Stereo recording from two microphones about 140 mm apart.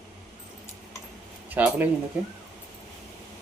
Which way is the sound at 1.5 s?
10° right (ahead or behind).